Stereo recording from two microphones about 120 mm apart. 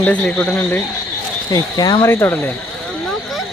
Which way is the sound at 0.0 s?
10° left (ahead or behind).